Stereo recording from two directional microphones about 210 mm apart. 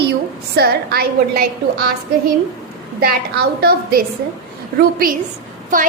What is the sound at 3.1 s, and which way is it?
Speech, 45° right (ahead or behind).